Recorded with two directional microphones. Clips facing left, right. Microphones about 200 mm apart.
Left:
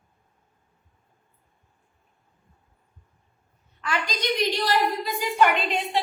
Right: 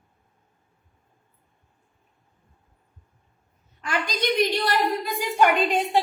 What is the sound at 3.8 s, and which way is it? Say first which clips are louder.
A woman's voice: right 2 dB; 50° right (ahead or behind).